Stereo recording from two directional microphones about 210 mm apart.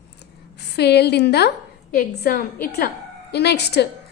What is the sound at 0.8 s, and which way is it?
A woman's voice, 50° left (ahead or behind).